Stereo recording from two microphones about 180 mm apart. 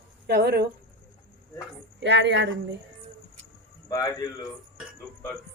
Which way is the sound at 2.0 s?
80° right.